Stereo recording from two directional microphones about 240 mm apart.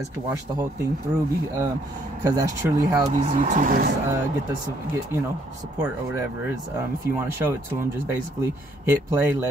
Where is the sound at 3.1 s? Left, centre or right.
Right.